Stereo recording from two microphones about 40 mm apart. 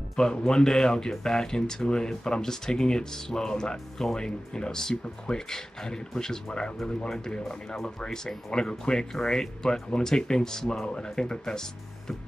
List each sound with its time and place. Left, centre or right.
0.5 s speech: centre